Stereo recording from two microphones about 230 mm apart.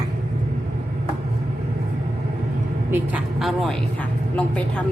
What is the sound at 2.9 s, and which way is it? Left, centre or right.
Speech, centre.